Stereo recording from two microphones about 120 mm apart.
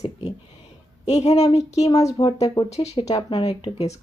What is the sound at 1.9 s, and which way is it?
Speech, 30° left (ahead or behind).